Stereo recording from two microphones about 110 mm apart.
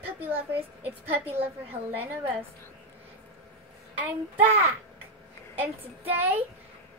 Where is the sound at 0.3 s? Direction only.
15° right (ahead or behind).